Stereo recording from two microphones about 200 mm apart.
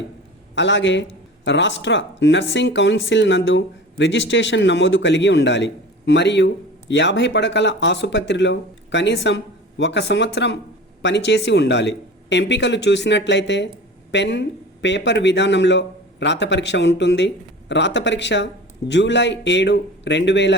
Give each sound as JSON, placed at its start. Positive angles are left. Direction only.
{"t": 0.5, "sound": "speech", "side_deg": 65}